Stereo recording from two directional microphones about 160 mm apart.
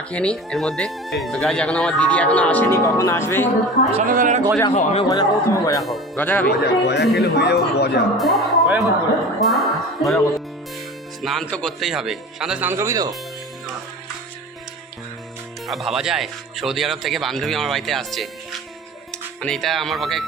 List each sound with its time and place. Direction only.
0.1 s speech: 5° left (ahead or behind)
3.9 s speech: 60° right (ahead or behind)
4.7 s a man's voice: 45° left (ahead or behind)
5.0 s speech: 20° left (ahead or behind)
6.1 s speech: 10° left (ahead or behind)
6.5 s a man's voice: 90° left
8.2 s speech: centre (ahead or behind); by 13.1 s 20° right (ahead or behind)
15.6 s speech: centre (ahead or behind)
19.4 s speech: 5° left (ahead or behind)